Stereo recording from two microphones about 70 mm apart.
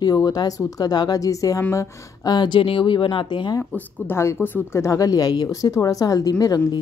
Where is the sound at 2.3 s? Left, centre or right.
Left.